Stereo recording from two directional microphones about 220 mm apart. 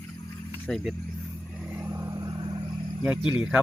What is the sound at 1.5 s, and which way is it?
Vehicle, 5° right (ahead or behind).